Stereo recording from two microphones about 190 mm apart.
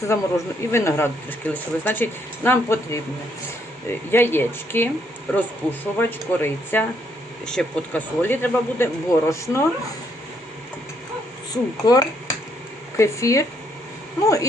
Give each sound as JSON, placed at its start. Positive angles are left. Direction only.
{"t": 0.0, "sound": "speech", "side_deg": 15}
{"t": 4.1, "sound": "speech", "side_deg": 10}
{"t": 11.5, "sound": "speech", "side_deg": 20}